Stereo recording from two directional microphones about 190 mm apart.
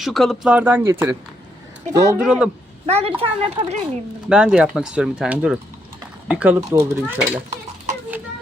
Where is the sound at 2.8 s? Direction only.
35° right (ahead or behind).